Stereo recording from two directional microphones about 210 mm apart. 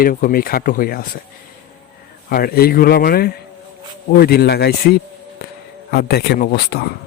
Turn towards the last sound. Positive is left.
turn(degrees=45)  # may be behind; listen again after turning